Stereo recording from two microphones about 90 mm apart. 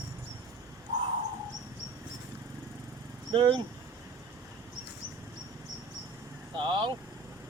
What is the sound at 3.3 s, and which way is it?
Speech, 60° right (ahead or behind).